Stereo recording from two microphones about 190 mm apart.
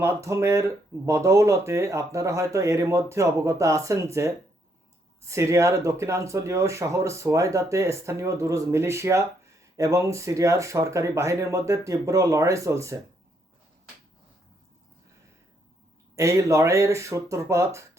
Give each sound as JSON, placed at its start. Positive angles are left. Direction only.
{"t": 0.0, "sound": "speech", "side_deg": -15}
{"t": 16.1, "sound": "speech", "side_deg": -15}